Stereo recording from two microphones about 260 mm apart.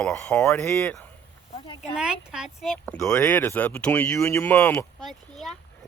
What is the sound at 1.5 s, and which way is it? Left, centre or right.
Speech, centre.